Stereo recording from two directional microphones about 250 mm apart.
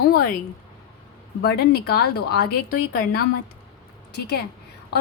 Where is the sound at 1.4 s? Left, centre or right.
Left.